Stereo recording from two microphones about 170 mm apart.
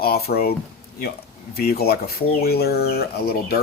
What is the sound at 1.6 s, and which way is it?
Speech, 65° left (ahead or behind).